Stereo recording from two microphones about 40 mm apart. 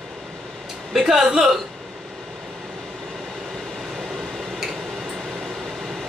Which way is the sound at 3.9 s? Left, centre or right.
Centre.